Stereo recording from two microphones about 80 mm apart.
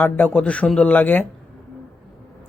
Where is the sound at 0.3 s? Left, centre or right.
Centre.